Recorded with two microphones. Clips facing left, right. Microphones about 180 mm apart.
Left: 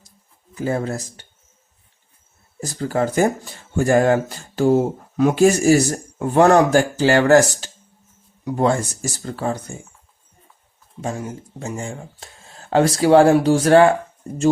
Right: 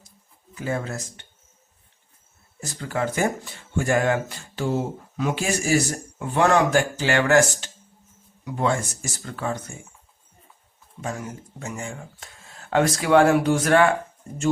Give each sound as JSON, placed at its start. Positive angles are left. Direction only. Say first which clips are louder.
{"t": 0.5, "sound": "speech", "louder": "left 5 dB", "side_deg": 35}
{"t": 2.6, "sound": "speech", "louder": "left 6 dB", "side_deg": 35}
{"t": 11.0, "sound": "speech", "louder": "left 4 dB", "side_deg": 30}